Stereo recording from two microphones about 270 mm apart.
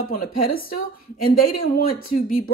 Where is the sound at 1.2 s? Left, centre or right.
Left.